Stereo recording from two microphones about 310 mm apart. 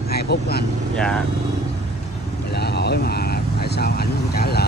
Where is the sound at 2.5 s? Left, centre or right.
Left.